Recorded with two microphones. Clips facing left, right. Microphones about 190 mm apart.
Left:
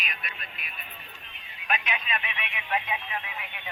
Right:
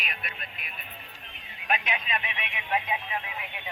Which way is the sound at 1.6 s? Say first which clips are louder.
Right 1 dB; 35° right (ahead or behind).